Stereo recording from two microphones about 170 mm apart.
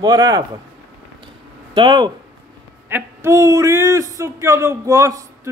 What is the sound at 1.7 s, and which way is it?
Speech, 30° right (ahead or behind).